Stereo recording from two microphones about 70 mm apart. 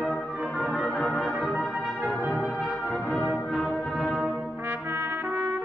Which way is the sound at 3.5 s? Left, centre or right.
Centre.